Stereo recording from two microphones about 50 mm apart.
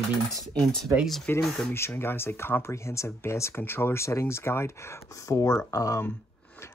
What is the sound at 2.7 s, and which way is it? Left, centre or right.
Speech, left.